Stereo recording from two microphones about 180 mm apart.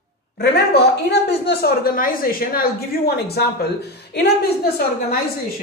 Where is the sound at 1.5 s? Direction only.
60° left (ahead or behind).